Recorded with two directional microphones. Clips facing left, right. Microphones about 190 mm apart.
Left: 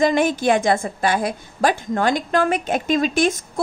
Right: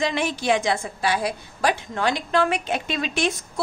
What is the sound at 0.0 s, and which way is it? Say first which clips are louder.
A woman's voice: left 7 dB; 45° left (ahead or behind).